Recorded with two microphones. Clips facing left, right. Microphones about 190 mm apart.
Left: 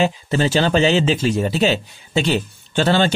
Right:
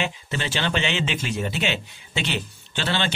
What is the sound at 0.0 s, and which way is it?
Speech, 40° left (ahead or behind).